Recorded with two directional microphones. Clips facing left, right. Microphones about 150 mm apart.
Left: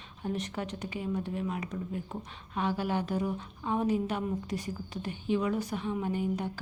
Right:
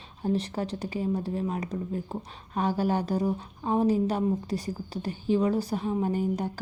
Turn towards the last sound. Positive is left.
turn(degrees=-40)  # may be behind; listen again after turning